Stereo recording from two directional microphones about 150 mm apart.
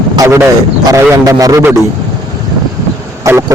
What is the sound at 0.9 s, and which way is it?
Speech, 25° right (ahead or behind).